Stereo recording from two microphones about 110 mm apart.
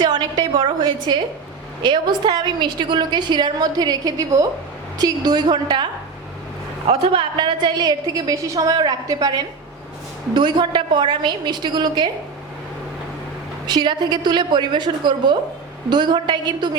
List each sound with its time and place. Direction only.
0.0 s a sound: 40° right (ahead or behind)
1.8 s a woman's voice: 40° right (ahead or behind)
6.8 s a woman's voice: 55° right (ahead or behind); by 12.0 s 40° right (ahead or behind)
13.7 s a woman's voice: 40° right (ahead or behind)